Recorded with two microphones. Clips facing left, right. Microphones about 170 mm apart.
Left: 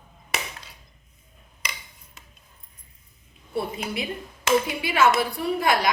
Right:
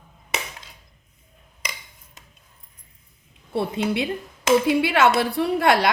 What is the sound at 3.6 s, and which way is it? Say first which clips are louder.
A woman's voice: right 5 dB; 70° right (ahead or behind).